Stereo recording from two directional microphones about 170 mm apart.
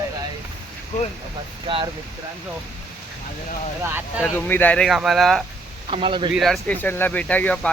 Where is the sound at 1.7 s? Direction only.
30° right (ahead or behind).